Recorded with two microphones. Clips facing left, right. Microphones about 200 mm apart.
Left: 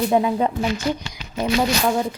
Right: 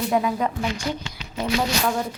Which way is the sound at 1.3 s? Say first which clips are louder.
Left 3 dB; 15° left (ahead or behind).